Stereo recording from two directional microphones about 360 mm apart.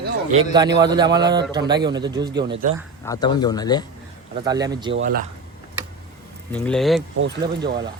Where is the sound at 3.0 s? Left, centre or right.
Centre.